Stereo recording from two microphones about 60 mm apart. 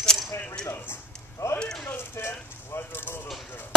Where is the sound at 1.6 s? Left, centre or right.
Centre.